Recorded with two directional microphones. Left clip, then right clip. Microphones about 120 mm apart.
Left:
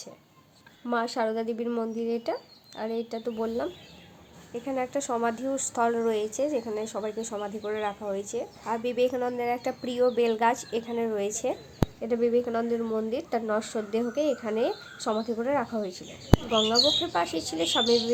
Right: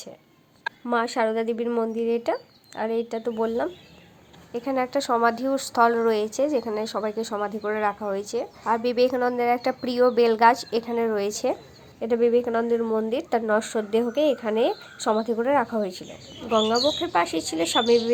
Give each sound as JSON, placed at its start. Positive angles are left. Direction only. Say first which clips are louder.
{"t": 0.9, "sound": "a woman's voice", "louder": "right 4 dB", "side_deg": -30}